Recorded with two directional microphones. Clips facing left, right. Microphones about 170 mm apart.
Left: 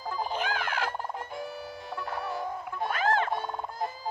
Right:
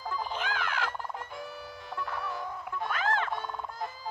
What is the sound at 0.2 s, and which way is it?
Music, 40° left (ahead or behind).